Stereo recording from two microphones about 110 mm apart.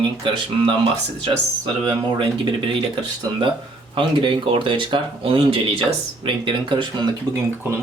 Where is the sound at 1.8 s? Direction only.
45° right (ahead or behind).